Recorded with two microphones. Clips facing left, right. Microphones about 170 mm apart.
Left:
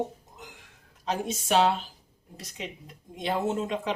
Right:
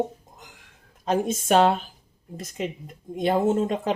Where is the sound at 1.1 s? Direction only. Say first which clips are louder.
Right 6 dB; 50° right (ahead or behind).